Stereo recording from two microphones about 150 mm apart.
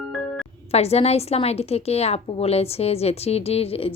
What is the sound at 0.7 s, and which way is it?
A woman's voice, 45° left (ahead or behind).